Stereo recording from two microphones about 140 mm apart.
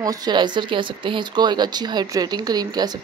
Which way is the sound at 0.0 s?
25° right (ahead or behind).